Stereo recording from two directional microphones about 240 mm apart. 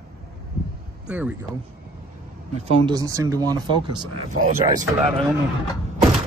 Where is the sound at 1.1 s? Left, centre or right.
Centre.